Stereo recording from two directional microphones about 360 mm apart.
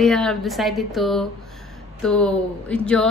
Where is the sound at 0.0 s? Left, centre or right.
Centre.